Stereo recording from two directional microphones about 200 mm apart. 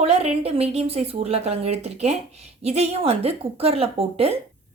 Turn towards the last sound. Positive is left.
turn(degrees=-30)  # may be behind; listen again after turning